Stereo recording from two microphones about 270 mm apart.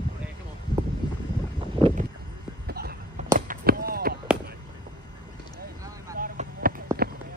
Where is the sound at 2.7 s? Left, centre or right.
Right.